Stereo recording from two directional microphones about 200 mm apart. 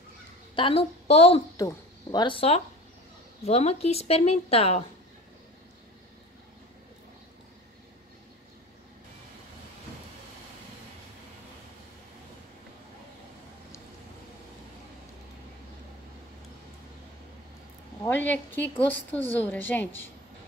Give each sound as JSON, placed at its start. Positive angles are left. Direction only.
{"t": 0.6, "sound": "speech", "side_deg": 30}
{"t": 1.6, "sound": "speech", "side_deg": 20}
{"t": 18.0, "sound": "a woman's voice", "side_deg": 10}